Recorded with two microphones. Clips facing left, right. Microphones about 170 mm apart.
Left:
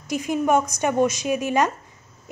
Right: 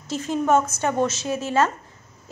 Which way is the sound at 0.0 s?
15° left (ahead or behind).